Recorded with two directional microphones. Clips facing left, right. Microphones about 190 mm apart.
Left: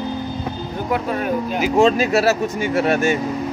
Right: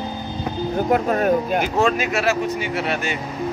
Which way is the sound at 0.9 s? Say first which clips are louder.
Right 2 dB; 45° right (ahead or behind).